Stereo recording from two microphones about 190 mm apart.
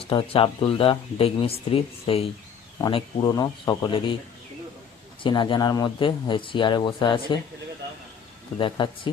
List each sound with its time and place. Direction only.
0.0 s speech: 30° left (ahead or behind)
5.2 s speech: 25° left (ahead or behind)
8.5 s speech: 25° left (ahead or behind)